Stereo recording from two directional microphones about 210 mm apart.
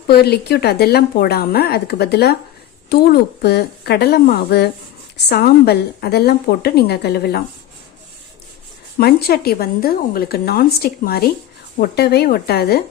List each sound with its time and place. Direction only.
0.1 s speech: 50° left (ahead or behind)
9.0 s speech: 50° left (ahead or behind)